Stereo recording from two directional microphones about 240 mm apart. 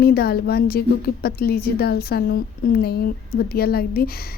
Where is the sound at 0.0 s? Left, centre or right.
Left.